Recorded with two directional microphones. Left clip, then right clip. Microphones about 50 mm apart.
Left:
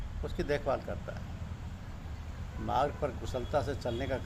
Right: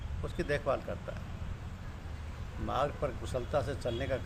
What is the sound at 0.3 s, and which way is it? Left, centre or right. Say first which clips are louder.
Speech: even; right.